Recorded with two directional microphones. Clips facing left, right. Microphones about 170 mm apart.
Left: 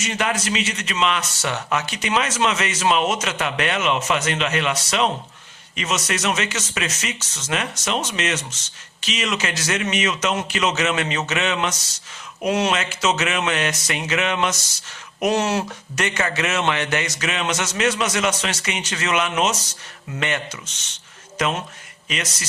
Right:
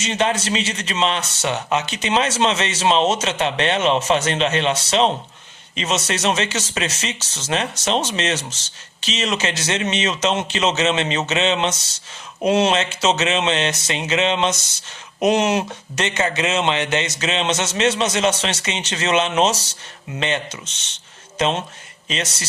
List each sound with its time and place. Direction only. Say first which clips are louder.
0.0 s a man's voice: right 3 dB; 25° right (ahead or behind)